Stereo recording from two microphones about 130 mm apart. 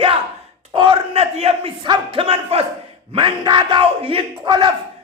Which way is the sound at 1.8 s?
40° right (ahead or behind).